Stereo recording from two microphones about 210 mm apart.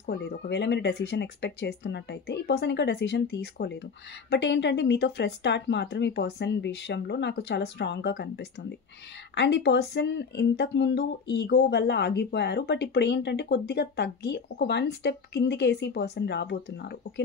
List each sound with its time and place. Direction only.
0.0 s speech: 50° left (ahead or behind)